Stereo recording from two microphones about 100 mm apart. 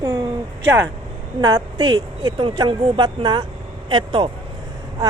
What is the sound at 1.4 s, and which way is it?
Speech, 40° right (ahead or behind).